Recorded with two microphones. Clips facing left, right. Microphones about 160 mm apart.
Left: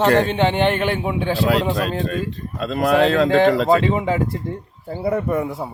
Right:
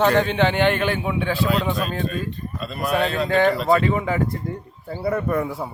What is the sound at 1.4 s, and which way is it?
Speech, 75° left (ahead or behind).